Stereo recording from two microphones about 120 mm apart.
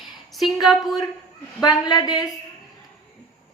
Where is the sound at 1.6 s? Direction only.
35° left (ahead or behind).